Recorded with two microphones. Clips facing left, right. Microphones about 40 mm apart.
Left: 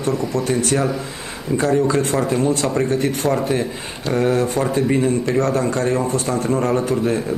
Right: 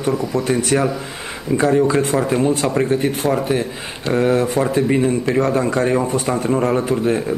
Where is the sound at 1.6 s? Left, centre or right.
Centre.